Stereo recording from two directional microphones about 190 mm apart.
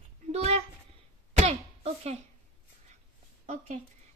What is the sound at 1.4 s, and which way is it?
Cough, 35° right (ahead or behind).